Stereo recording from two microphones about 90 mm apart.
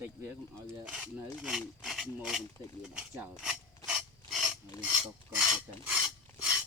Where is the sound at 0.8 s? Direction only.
10° right (ahead or behind).